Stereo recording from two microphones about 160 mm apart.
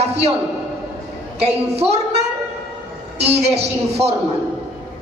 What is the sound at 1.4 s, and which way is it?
Speech, 40° right (ahead or behind).